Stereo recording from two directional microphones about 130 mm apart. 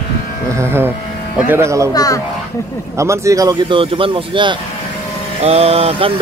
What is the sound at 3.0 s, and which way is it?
Speech, 25° right (ahead or behind).